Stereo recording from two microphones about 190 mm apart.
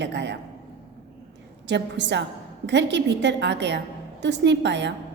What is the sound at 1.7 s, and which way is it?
A woman's voice, 65° right (ahead or behind).